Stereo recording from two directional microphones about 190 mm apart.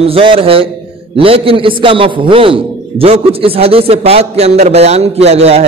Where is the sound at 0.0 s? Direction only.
30° right (ahead or behind).